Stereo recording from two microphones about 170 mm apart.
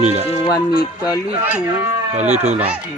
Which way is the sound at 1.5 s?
10° right (ahead or behind).